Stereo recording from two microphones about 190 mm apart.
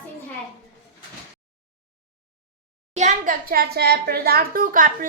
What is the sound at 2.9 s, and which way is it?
A child's voice, 40° right (ahead or behind).